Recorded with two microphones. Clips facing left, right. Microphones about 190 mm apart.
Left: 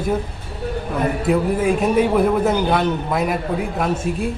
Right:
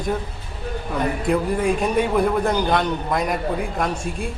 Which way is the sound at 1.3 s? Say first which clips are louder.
Left 2 dB; 5° left (ahead or behind).